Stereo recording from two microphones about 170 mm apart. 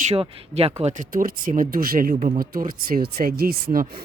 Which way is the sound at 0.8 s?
50° right (ahead or behind).